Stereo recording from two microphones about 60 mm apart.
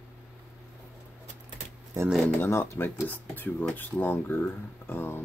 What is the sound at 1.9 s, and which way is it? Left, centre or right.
Speech, right.